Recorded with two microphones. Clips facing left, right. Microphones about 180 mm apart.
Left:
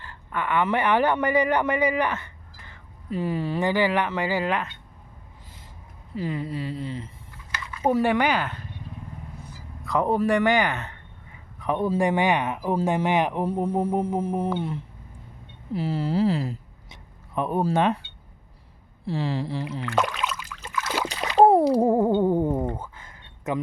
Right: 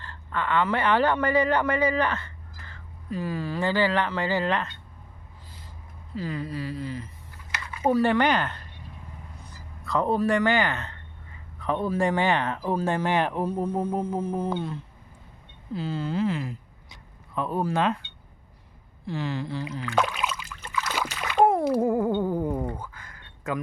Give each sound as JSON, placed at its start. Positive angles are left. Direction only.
{"t": 0.0, "sound": "speech", "side_deg": 15}
{"t": 6.1, "sound": "speech", "side_deg": 25}
{"t": 13.4, "sound": "speech", "side_deg": 25}
{"t": 15.7, "sound": "speech", "side_deg": 30}
{"t": 16.9, "sound": "a sound", "side_deg": 20}
{"t": 17.6, "sound": "speech", "side_deg": 30}
{"t": 19.0, "sound": "speech", "side_deg": 30}
{"t": 19.8, "sound": "a sound", "side_deg": 0}
{"t": 20.7, "sound": "splash", "side_deg": 5}
{"t": 21.1, "sound": "splash", "side_deg": 35}
{"t": 22.2, "sound": "a sound", "side_deg": 25}